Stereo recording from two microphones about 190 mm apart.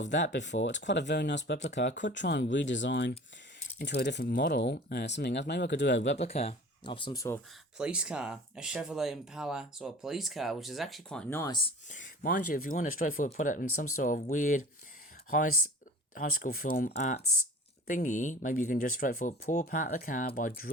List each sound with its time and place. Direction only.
0.1 s speech: 70° left (ahead or behind)
6.1 s speech: 35° left (ahead or behind); by 7.3 s 20° left (ahead or behind)
7.8 s speech: 5° right (ahead or behind); by 11.5 s 10° left (ahead or behind)
11.9 s speech: 45° left (ahead or behind)
16.9 s speech: 35° left (ahead or behind)